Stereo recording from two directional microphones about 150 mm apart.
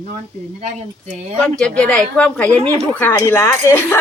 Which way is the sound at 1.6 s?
5° left (ahead or behind).